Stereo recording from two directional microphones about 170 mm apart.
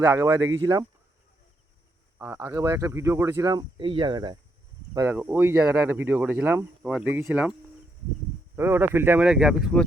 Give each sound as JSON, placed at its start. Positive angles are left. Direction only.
{"t": 0.0, "sound": "speech", "side_deg": -15}
{"t": 2.1, "sound": "speech", "side_deg": -15}
{"t": 4.9, "sound": "speech", "side_deg": -15}
{"t": 8.5, "sound": "speech", "side_deg": -15}